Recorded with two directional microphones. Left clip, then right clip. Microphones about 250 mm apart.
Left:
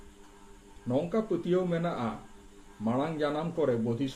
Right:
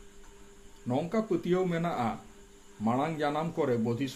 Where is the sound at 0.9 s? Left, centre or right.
Right.